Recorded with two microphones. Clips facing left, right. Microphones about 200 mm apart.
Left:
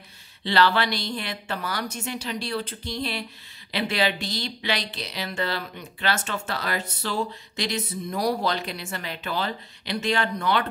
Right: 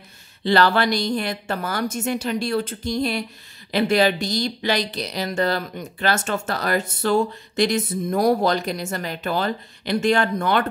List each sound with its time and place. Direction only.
0.4 s speech: 45° right (ahead or behind)